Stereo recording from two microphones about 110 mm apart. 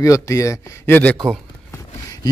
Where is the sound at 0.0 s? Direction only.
30° left (ahead or behind).